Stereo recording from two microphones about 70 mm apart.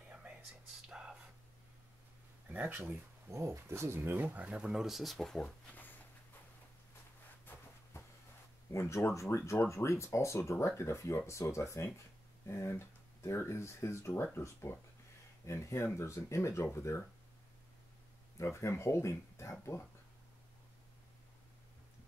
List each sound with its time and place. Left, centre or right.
0.5 s whispering: centre
2.5 s speech: right
3.3 s speech: right; by 5.5 s centre
7.9 s a sound: left
8.7 s speech: left
18.4 s speech: left